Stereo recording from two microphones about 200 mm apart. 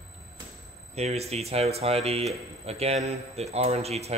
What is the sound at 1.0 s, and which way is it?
A man's voice, 30° right (ahead or behind).